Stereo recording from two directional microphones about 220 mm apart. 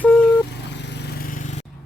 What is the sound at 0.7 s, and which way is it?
Vehicle, 50° left (ahead or behind).